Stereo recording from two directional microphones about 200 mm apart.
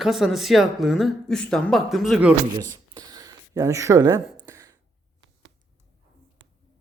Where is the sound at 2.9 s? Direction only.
20° right (ahead or behind).